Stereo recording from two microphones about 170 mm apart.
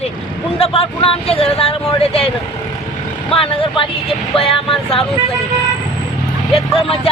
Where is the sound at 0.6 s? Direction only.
35° left (ahead or behind).